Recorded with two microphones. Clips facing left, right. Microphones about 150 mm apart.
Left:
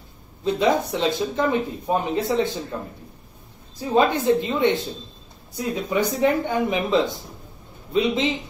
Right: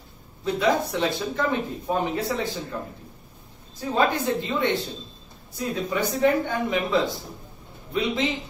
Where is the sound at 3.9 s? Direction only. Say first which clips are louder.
Left 5 dB; 20° left (ahead or behind).